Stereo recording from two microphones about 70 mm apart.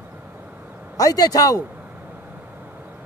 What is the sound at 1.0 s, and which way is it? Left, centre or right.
Speech, left.